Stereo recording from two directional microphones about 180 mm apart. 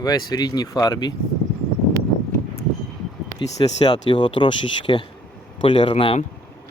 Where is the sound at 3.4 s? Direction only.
25° left (ahead or behind).